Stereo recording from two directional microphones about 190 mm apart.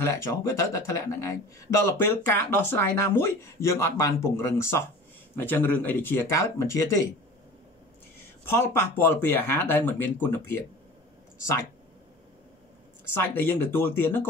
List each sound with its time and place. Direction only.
0.0 s speech: 15° left (ahead or behind)
8.5 s speech: 10° left (ahead or behind)
13.1 s speech: 10° left (ahead or behind)